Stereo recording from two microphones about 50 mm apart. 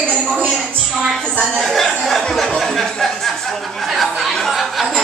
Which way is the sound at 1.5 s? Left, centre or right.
Centre.